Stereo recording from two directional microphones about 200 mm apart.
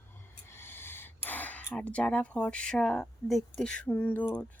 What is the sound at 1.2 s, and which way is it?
Speech, 10° left (ahead or behind).